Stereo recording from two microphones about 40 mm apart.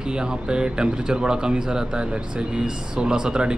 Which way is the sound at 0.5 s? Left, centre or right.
Right.